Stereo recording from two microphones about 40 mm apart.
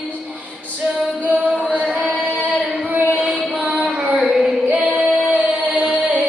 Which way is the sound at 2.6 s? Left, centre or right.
Right.